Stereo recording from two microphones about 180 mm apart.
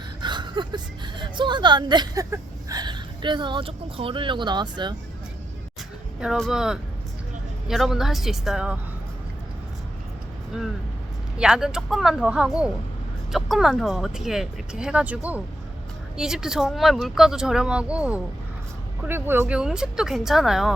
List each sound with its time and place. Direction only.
0.2 s speech: 25° right (ahead or behind)
6.1 s speech: centre (ahead or behind)
11.3 s speech: 5° right (ahead or behind)